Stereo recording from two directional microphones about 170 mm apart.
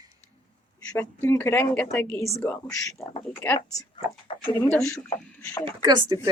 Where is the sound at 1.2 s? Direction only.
15° left (ahead or behind).